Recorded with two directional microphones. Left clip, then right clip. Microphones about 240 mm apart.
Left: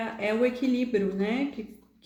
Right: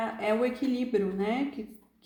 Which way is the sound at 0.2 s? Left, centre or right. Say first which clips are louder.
Left 3 dB; right.